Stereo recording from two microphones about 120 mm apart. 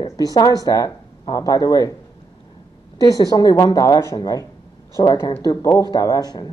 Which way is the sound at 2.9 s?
35° left (ahead or behind).